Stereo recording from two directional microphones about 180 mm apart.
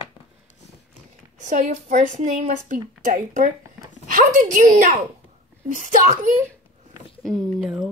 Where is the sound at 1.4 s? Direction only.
40° right (ahead or behind).